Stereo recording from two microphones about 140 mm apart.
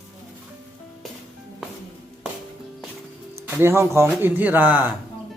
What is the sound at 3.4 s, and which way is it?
A man's voice, 15° right (ahead or behind).